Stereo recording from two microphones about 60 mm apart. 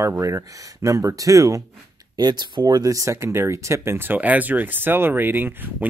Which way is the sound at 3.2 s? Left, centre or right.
Right.